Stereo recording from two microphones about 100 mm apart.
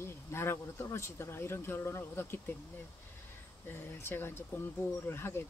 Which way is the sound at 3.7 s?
25° left (ahead or behind).